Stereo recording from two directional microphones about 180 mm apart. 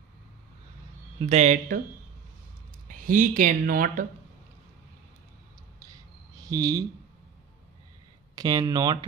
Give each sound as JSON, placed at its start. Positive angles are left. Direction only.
{"t": 1.2, "sound": "speech", "side_deg": -40}
{"t": 2.9, "sound": "speech", "side_deg": -50}
{"t": 5.8, "sound": "a sound", "side_deg": -20}
{"t": 8.4, "sound": "speech", "side_deg": -25}